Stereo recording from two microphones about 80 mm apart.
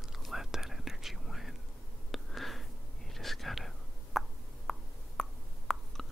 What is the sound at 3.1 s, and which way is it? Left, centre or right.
Whispering, centre.